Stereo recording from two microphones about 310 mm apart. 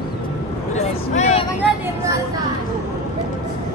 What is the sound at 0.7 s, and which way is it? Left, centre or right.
Vehicle, left.